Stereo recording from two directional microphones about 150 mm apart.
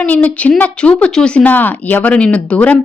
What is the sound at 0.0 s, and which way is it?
A woman's voice, 10° left (ahead or behind).